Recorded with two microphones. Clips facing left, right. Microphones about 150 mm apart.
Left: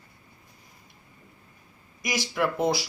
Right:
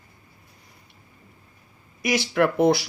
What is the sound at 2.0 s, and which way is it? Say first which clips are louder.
Speech: right 6 dB; 65° right (ahead or behind).